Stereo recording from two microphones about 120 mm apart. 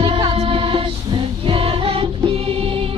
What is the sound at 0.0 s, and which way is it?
Music, 45° right (ahead or behind).